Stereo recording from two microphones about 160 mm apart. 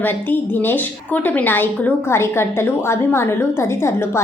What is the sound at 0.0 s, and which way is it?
A woman's voice, 10° left (ahead or behind).